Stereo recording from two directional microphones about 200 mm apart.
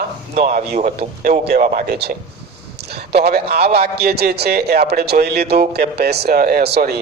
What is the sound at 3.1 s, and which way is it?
A man's voice, 50° right (ahead or behind).